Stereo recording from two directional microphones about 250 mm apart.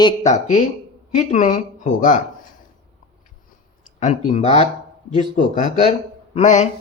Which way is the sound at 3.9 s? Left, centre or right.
Left.